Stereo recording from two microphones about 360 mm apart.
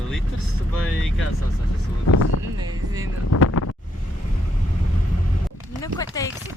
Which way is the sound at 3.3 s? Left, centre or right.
Left.